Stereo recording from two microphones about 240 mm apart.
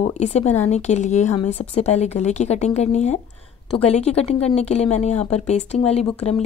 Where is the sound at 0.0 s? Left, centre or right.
Left.